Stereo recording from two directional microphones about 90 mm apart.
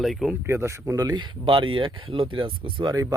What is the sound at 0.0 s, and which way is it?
Speech, centre (ahead or behind).